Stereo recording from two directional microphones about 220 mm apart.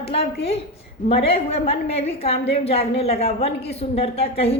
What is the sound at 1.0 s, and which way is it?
A woman's voice, 25° left (ahead or behind).